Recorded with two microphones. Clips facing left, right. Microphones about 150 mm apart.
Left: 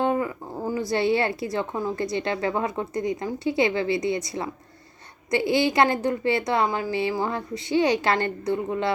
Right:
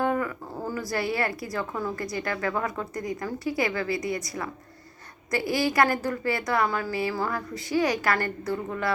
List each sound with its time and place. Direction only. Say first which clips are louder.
0.0 s speech: left 2 dB; 20° left (ahead or behind)